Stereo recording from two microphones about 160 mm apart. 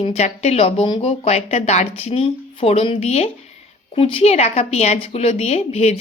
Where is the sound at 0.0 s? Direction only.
40° left (ahead or behind).